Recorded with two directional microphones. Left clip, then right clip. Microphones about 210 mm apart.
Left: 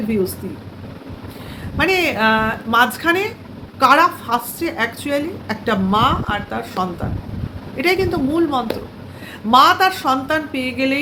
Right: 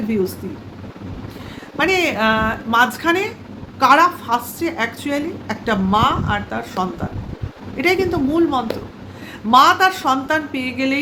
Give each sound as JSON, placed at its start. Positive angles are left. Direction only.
{"t": 1.8, "sound": "a woman's voice", "side_deg": -5}